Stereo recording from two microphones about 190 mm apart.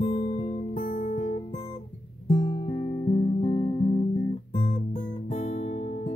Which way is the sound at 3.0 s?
35° left (ahead or behind).